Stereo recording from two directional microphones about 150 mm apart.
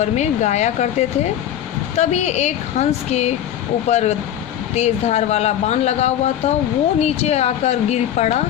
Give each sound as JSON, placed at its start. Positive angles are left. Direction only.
{"t": 0.0, "sound": "speech", "side_deg": 50}